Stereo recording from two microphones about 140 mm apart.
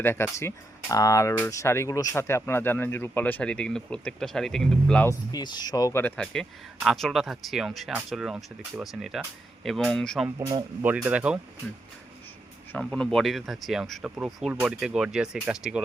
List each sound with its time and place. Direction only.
0.0 s speech: 15° left (ahead or behind)
5.0 s speech: 30° left (ahead or behind); by 10.2 s 5° left (ahead or behind)
10.2 s speech: 25° right (ahead or behind)
10.8 s speech: 10° right (ahead or behind)
12.7 s speech: 5° left (ahead or behind)